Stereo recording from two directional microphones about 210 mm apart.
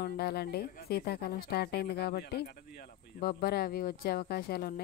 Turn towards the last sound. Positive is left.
turn(degrees=45)  # may be behind; listen again after turning